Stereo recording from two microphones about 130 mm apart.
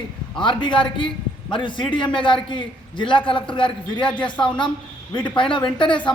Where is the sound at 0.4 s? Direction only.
40° left (ahead or behind).